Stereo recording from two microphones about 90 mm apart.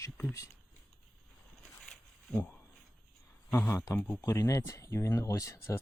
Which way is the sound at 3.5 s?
30° left (ahead or behind).